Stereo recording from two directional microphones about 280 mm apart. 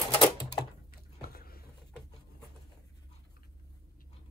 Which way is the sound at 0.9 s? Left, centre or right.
Left.